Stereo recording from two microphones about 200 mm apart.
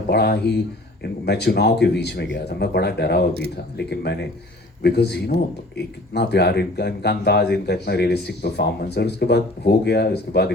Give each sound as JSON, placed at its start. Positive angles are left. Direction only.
{"t": 0.1, "sound": "speech", "side_deg": 55}